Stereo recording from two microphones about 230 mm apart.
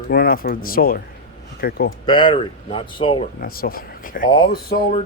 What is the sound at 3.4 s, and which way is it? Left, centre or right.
Speech, left.